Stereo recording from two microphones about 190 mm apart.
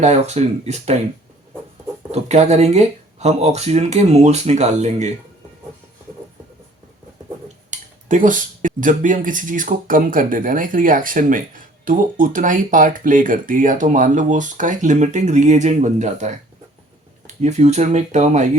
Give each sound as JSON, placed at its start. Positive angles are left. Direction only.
{"t": 0.0, "sound": "speech", "side_deg": -35}
{"t": 2.1, "sound": "speech", "side_deg": -35}
{"t": 7.4, "sound": "speech", "side_deg": -40}
{"t": 17.4, "sound": "speech", "side_deg": -35}